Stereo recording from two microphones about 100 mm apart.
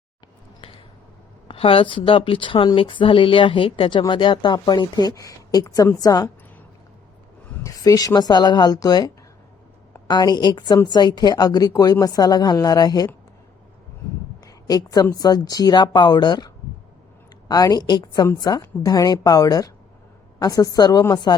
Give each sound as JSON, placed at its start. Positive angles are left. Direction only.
{"t": 1.5, "sound": "a woman's voice", "side_deg": 65}
{"t": 7.6, "sound": "a woman's voice", "side_deg": 35}
{"t": 14.4, "sound": "a sound", "side_deg": 40}
{"t": 15.1, "sound": "speech", "side_deg": 40}
{"t": 17.5, "sound": "a woman's voice", "side_deg": 40}